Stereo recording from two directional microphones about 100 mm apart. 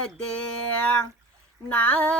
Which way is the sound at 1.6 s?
15° left (ahead or behind).